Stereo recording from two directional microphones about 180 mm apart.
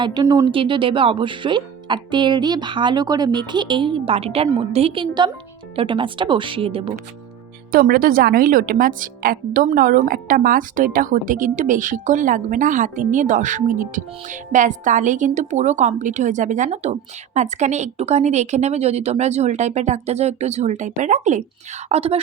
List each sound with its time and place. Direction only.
0.0 s speech: 25° right (ahead or behind)
7.7 s a woman's voice: 55° right (ahead or behind); by 22.2 s 35° right (ahead or behind)